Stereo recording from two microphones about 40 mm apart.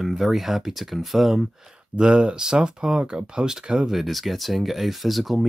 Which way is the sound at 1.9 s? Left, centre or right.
Right.